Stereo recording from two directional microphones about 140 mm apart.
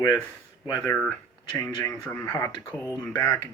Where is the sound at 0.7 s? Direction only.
30° left (ahead or behind).